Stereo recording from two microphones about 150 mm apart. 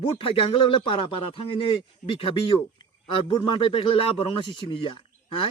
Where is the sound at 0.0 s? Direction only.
35° left (ahead or behind).